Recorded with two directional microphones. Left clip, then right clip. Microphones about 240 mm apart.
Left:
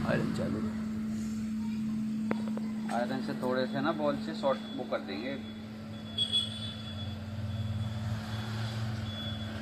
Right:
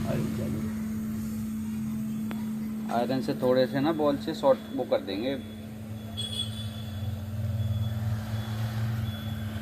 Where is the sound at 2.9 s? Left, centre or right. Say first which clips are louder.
Right 6 dB; right.